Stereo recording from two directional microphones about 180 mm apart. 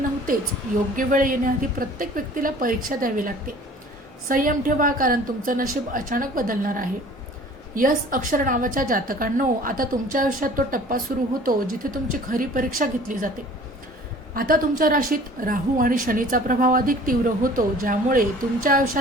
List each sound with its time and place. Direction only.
0.9 s a woman's voice: 50° right (ahead or behind)
14.3 s a woman's voice: 50° right (ahead or behind)